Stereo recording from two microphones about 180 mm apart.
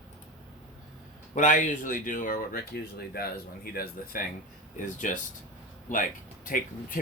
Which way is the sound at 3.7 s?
55° left (ahead or behind).